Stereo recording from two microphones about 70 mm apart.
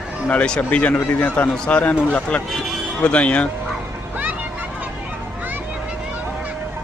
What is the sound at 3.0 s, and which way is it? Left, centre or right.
Speech, centre.